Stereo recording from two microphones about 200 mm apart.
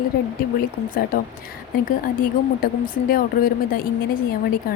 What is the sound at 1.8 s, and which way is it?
Speech, 45° left (ahead or behind).